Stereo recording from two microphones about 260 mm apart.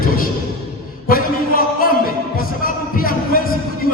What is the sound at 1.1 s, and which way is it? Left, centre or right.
Music, left.